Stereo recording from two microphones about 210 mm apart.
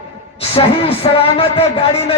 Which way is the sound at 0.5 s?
25° left (ahead or behind).